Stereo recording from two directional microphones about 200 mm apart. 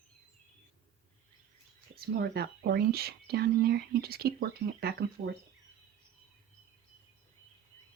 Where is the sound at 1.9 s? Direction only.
50° right (ahead or behind).